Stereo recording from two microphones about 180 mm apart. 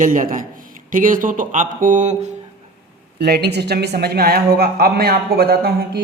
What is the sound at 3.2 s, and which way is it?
Speech, 65° right (ahead or behind).